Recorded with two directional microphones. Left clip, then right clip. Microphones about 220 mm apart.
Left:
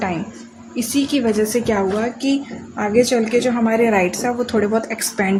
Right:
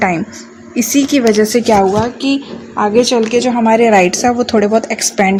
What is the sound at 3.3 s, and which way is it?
A woman's voice, 30° right (ahead or behind).